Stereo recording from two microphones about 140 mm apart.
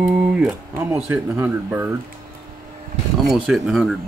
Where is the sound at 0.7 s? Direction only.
15° right (ahead or behind).